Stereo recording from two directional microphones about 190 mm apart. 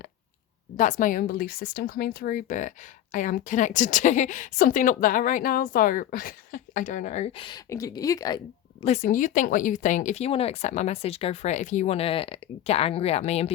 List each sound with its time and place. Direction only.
0.8 s speech: 45° left (ahead or behind); by 8.4 s 20° left (ahead or behind)
8.8 s speech: 35° left (ahead or behind)